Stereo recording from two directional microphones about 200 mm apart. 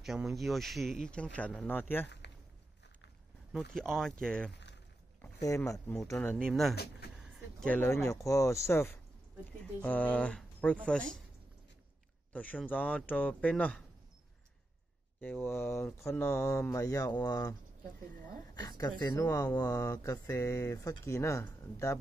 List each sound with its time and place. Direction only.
0.0 s speech: centre (ahead or behind)
3.5 s speech: centre (ahead or behind)
6.7 s speech: 55° left (ahead or behind)
7.2 s speech: centre (ahead or behind)
12.3 s speech: 10° left (ahead or behind)
15.1 s speech: 10° left (ahead or behind)